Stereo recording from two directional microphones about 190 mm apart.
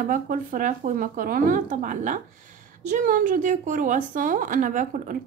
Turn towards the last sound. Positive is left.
turn(degrees=-40)  # may be behind; listen again after turning